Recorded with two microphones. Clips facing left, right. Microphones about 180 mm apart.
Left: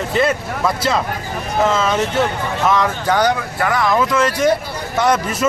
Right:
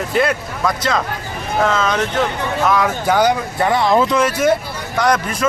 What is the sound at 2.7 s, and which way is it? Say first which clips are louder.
Speech: even; 5° right (ahead or behind).